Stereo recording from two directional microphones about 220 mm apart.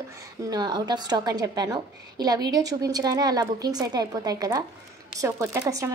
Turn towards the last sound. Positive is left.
turn(degrees=-15)  # may be behind; listen again after turning